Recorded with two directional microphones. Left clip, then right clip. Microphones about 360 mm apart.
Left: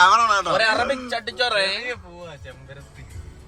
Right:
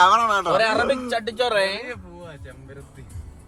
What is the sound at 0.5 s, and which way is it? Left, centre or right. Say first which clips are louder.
Speech: even; centre.